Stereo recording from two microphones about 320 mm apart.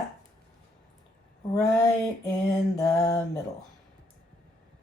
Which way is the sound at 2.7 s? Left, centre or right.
Centre.